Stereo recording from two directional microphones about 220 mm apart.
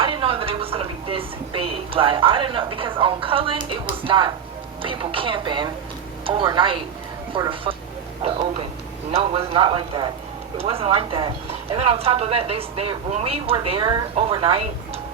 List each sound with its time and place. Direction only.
0.0 s a woman's voice: 25° right (ahead or behind)